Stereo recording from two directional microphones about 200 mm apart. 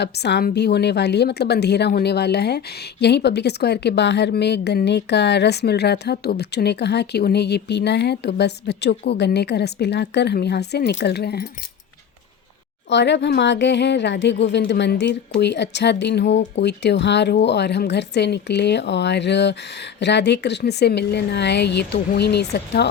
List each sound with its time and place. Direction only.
0.0 s a woman's voice: 55° left (ahead or behind)
12.9 s a woman's voice: 60° left (ahead or behind)